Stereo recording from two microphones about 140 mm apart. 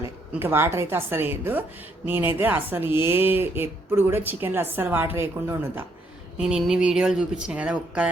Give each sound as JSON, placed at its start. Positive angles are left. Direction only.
{"t": 0.0, "sound": "a woman's voice", "side_deg": -15}
{"t": 6.3, "sound": "speech", "side_deg": -5}